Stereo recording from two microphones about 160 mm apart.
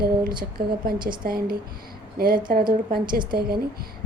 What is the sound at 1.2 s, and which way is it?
A woman's voice, 65° right (ahead or behind).